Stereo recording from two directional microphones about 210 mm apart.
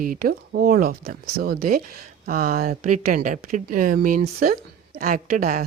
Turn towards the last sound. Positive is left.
turn(degrees=-40)  # may be behind; listen again after turning